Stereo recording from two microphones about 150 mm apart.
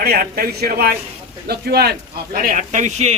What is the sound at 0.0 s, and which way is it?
A man's voice, 85° right.